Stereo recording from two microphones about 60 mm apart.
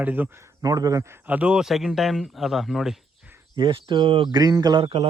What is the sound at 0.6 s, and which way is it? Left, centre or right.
Speech, right.